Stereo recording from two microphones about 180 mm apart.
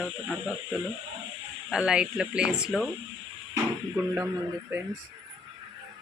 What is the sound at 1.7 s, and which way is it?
Speech, centre (ahead or behind).